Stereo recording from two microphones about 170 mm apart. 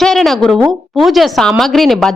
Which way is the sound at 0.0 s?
Centre (ahead or behind).